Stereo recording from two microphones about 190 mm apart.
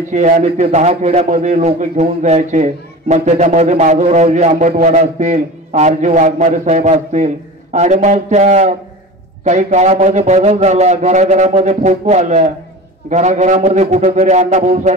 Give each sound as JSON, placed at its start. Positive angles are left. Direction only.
{"t": 0.1, "sound": "a man's voice", "side_deg": -35}